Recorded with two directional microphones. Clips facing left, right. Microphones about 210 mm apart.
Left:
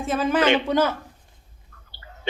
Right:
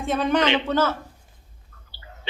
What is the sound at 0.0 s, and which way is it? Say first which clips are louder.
Speech: even; centre (ahead or behind).